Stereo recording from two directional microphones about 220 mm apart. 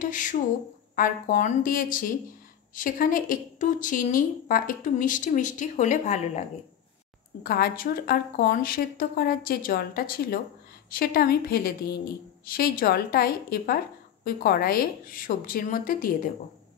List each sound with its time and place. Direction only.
0.0 s a woman's voice: 35° left (ahead or behind)
7.4 s a woman's voice: 45° left (ahead or behind)